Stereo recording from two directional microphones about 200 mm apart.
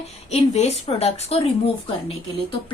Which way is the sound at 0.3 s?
35° left (ahead or behind).